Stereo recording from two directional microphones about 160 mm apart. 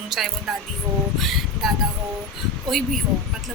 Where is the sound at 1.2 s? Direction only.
Centre (ahead or behind).